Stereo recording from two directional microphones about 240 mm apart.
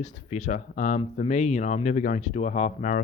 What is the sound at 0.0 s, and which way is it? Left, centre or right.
Speech, left.